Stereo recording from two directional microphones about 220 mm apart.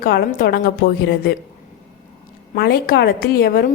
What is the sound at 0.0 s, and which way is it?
A woman's voice, 40° left (ahead or behind).